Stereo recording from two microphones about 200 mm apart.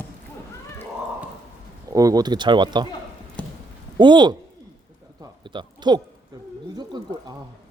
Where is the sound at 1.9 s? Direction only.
15° right (ahead or behind).